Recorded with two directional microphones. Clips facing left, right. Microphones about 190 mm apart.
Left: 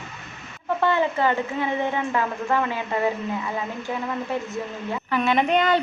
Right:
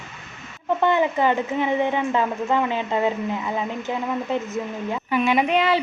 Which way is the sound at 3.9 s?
20° right (ahead or behind).